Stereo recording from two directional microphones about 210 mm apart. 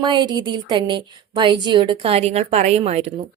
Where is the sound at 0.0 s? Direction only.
20° right (ahead or behind).